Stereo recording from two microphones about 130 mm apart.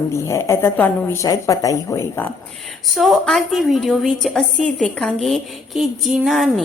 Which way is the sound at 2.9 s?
Centre (ahead or behind).